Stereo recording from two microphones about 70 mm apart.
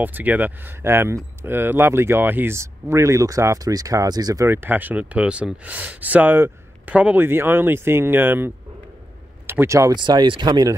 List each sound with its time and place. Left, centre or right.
0.0 s speech: right
4.5 s speech: right
6.9 s speech: centre
7.2 s speech: right
9.9 s speech: right